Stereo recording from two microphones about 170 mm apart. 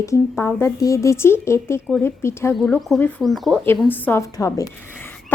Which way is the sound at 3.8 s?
15° left (ahead or behind).